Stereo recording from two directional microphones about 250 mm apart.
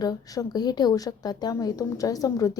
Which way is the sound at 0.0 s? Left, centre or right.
Centre.